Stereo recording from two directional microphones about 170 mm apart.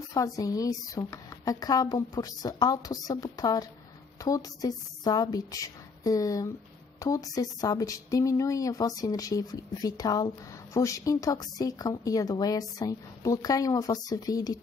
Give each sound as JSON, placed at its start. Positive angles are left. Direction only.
{"t": 0.1, "sound": "speech", "side_deg": 20}